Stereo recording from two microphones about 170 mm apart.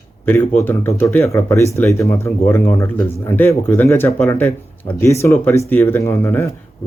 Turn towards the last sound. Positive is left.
turn(degrees=15)  # may be behind; listen again after turning